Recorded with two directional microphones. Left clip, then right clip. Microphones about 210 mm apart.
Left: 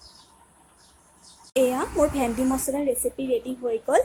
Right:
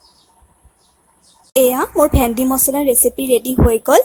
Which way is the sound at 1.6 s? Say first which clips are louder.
Right 9 dB; 45° right (ahead or behind).